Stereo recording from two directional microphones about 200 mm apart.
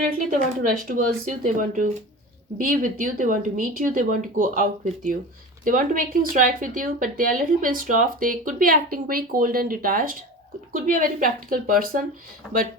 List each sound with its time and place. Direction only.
0.3 s speech: 40° right (ahead or behind)
5.6 s a woman's voice: 45° right (ahead or behind)